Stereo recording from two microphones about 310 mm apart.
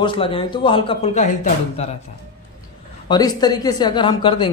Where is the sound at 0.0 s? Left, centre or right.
Centre.